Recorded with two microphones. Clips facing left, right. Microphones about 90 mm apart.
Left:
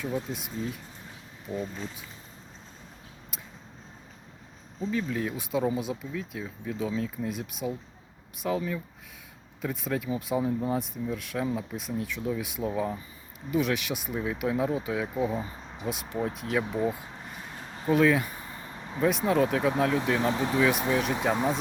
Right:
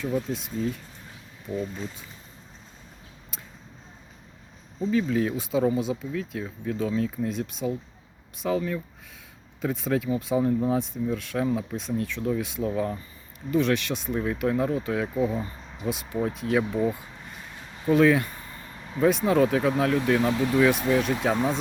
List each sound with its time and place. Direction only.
0.3 s speech: 5° left (ahead or behind)
4.9 s speech: centre (ahead or behind)
17.9 s speech: centre (ahead or behind)
18.3 s a sound: 20° left (ahead or behind)
18.9 s speech: centre (ahead or behind)
20.3 s speech: 20° left (ahead or behind)
20.6 s speech: centre (ahead or behind)